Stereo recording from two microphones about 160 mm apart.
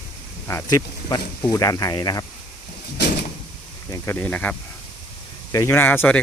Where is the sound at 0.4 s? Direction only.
15° left (ahead or behind).